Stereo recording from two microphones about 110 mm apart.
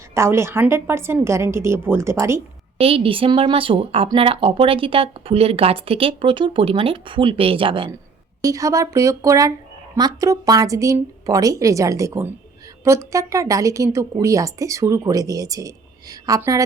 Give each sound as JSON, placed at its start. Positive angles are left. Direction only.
{"t": 0.1, "sound": "a woman's voice", "side_deg": -25}
{"t": 2.7, "sound": "a woman's voice", "side_deg": -60}
{"t": 8.4, "sound": "a woman's voice", "side_deg": -30}